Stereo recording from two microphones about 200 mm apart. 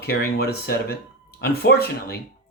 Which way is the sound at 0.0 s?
50° left (ahead or behind).